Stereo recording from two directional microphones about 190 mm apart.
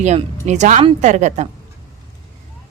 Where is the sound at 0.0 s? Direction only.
35° right (ahead or behind).